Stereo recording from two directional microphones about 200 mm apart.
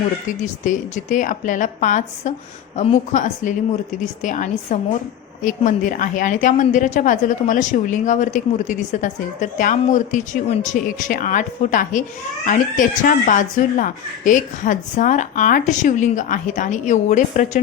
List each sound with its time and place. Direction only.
0.6 s a woman's voice: 40° left (ahead or behind)